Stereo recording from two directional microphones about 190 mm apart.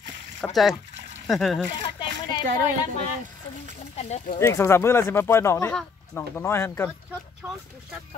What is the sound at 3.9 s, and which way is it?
Speech, 35° left (ahead or behind).